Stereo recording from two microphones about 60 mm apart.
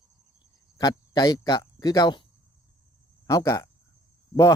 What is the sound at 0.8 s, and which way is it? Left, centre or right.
Speech, left.